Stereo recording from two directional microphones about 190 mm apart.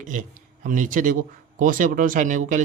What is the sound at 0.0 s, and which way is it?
Speech, 40° right (ahead or behind).